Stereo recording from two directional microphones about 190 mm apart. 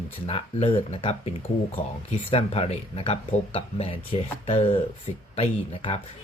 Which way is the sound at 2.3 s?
30° left (ahead or behind).